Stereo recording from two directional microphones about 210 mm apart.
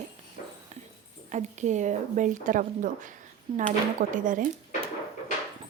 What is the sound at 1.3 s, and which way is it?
A woman's voice, 35° right (ahead or behind).